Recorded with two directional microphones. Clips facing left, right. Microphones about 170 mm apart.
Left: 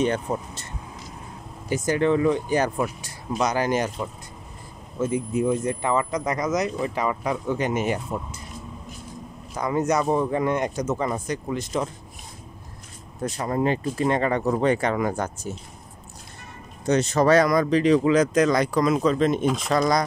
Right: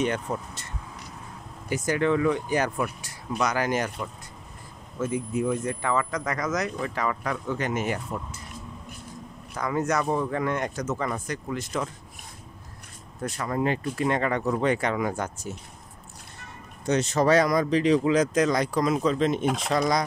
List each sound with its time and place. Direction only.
0.0 s speech: 30° left (ahead or behind)
1.7 s speech: 30° left (ahead or behind)
9.5 s speech: 20° left (ahead or behind)
13.2 s speech: 30° left (ahead or behind)
16.9 s speech: 45° left (ahead or behind); by 19.1 s 80° left
19.1 s speech: 50° left (ahead or behind)